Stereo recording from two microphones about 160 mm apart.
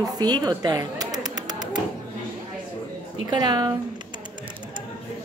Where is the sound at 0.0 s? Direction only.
25° right (ahead or behind).